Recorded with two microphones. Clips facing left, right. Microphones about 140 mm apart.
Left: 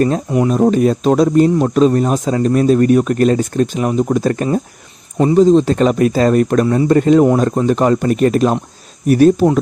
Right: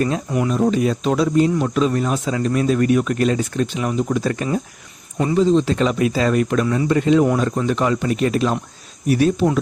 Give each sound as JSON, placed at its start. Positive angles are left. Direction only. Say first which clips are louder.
{"t": 0.3, "sound": "speech", "louder": "left 6 dB", "side_deg": 30}
{"t": 0.5, "sound": "speech", "louder": "left 5 dB", "side_deg": 45}